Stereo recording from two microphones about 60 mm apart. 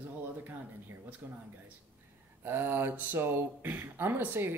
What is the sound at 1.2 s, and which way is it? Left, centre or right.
Speech, right.